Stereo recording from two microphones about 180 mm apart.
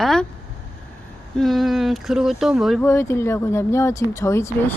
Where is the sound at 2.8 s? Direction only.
15° left (ahead or behind).